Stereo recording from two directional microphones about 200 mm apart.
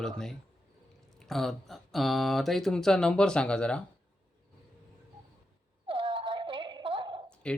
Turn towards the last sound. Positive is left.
turn(degrees=5)  # may be behind; listen again after turning